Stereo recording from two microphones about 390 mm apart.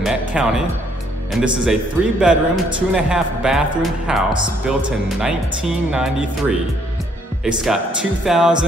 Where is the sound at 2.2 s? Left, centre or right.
Centre.